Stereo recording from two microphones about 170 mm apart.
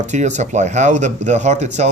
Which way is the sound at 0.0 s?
45° right (ahead or behind).